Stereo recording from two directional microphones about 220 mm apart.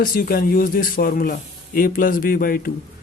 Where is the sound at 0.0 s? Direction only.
40° left (ahead or behind).